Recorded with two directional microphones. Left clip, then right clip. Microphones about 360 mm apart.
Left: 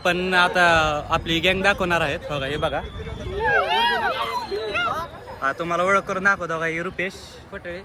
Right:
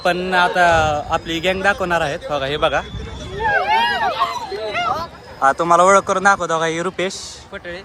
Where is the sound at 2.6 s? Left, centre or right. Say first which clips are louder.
Right 9 dB; right.